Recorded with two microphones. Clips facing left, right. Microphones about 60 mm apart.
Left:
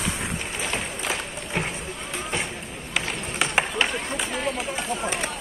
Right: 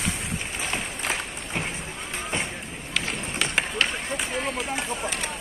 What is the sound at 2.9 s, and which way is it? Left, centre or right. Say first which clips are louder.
Run: left 2 dB; centre.